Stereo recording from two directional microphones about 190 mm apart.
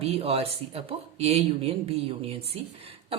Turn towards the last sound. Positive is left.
turn(degrees=-30)  # may be behind; listen again after turning